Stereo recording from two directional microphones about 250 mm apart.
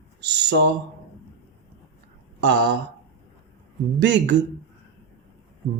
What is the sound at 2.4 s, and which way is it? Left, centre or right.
Speech, right.